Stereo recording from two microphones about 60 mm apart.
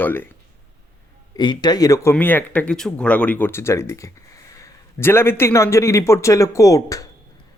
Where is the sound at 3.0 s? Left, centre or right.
Left.